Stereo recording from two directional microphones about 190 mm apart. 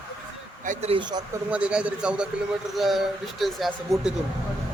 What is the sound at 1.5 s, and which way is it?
Speech, 5° right (ahead or behind).